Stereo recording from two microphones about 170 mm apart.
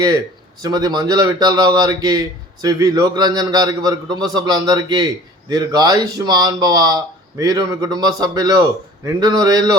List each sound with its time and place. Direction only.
0.6 s a man's voice: 20° right (ahead or behind)